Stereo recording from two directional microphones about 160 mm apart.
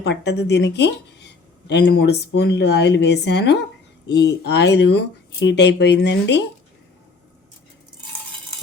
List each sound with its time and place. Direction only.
0.0 s speech: 90° left